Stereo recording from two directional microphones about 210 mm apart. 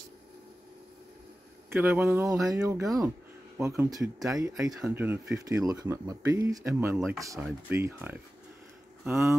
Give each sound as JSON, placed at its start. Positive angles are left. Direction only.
{"t": 1.7, "sound": "speech", "side_deg": -10}
{"t": 4.7, "sound": "speech", "side_deg": -5}